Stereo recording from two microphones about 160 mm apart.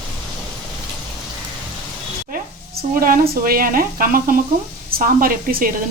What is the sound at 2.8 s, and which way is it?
A woman's voice, 65° right (ahead or behind).